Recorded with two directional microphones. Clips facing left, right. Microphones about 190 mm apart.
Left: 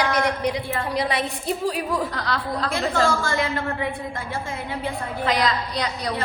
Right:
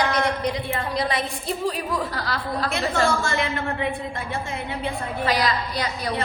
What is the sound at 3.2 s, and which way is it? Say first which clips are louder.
A woman's voice: left 1 dB; 25° right (ahead or behind).